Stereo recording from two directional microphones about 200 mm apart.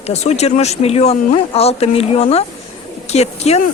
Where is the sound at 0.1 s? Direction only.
35° left (ahead or behind).